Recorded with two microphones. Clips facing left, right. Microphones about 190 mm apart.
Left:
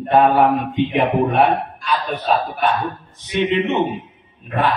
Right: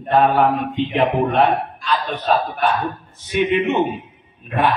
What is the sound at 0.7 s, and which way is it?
Speech, 15° left (ahead or behind).